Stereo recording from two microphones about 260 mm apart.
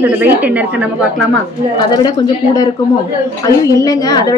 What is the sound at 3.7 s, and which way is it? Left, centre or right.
Speech, centre.